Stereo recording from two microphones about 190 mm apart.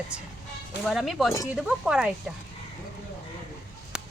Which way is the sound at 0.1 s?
5° right (ahead or behind).